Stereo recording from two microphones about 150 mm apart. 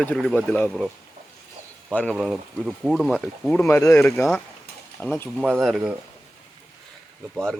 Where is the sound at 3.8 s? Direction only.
15° left (ahead or behind).